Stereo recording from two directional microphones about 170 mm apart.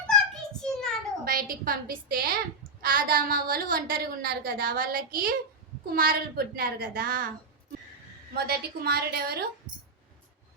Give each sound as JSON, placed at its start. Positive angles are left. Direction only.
{"t": 0.6, "sound": "a sound", "side_deg": 5}
{"t": 1.2, "sound": "a woman's voice", "side_deg": -60}
{"t": 8.4, "sound": "a woman's voice", "side_deg": -65}